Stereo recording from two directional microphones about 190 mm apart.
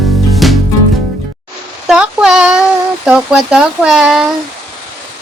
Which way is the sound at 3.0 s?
5° right (ahead or behind).